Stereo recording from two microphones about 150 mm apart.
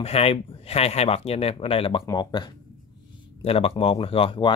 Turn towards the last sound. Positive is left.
turn(degrees=35)  # may be behind; listen again after turning